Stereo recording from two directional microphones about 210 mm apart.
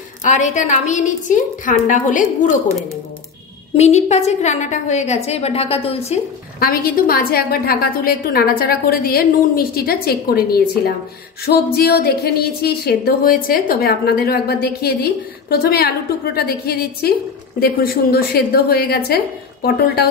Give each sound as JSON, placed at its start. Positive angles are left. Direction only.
{"t": 0.2, "sound": "a woman's voice", "side_deg": 35}
{"t": 3.7, "sound": "a woman's voice", "side_deg": 30}
{"t": 6.6, "sound": "a woman's voice", "side_deg": 45}